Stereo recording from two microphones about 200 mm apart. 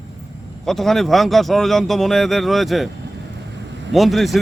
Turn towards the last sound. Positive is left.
turn(degrees=0)  # may be behind; listen again after turning